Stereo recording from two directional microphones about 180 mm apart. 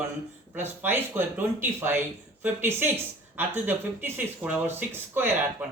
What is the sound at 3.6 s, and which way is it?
Speech, 10° right (ahead or behind).